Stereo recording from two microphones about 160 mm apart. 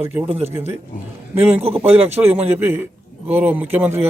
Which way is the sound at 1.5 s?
40° right (ahead or behind).